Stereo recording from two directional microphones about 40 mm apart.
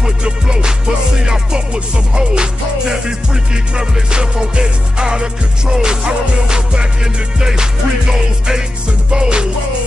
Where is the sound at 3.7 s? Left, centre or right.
Right.